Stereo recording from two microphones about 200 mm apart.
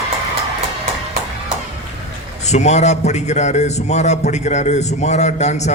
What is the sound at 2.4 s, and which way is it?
A man's voice, 35° left (ahead or behind).